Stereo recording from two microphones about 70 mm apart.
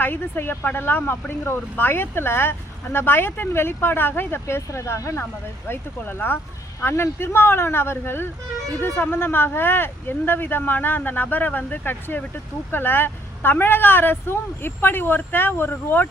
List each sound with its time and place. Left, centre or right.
0.0 s speech: left